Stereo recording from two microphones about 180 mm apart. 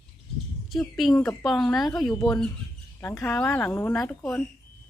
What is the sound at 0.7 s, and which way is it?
Speech, centre (ahead or behind).